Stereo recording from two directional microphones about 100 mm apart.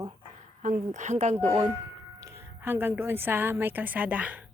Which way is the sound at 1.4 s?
60° right (ahead or behind).